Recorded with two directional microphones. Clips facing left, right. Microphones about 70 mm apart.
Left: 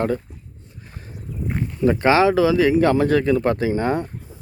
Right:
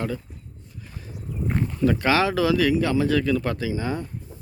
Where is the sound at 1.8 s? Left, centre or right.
Left.